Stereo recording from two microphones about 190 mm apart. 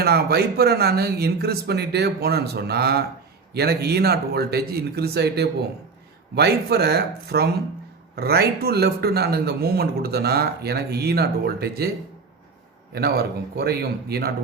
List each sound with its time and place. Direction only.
0.0 s a man's voice: 55° right (ahead or behind)
12.9 s a man's voice: 55° right (ahead or behind)